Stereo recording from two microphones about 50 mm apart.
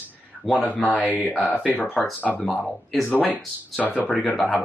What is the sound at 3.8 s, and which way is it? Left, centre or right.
Speech, left.